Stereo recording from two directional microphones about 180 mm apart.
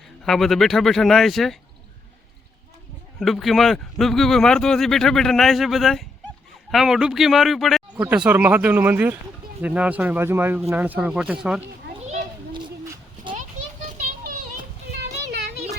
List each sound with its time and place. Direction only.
0.3 s a man's voice: centre (ahead or behind)
3.2 s a man's voice: centre (ahead or behind)
15.3 s a sound: 65° right (ahead or behind)